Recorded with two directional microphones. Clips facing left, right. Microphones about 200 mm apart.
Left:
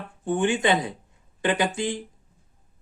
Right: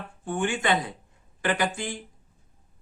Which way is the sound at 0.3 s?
20° left (ahead or behind).